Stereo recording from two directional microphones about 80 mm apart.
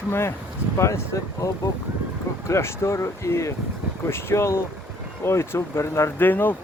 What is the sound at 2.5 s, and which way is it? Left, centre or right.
Speech, left.